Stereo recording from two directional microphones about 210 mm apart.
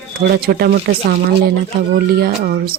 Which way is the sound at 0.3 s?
45° right (ahead or behind).